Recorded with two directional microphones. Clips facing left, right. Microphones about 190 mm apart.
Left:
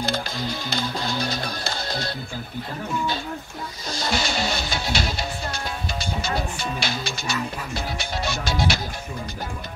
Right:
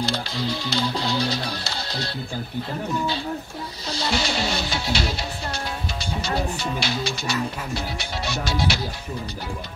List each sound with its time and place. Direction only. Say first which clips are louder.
0.0 s music: right 1 dB; 50° left (ahead or behind)
3.9 s music: right 1 dB; 50° left (ahead or behind)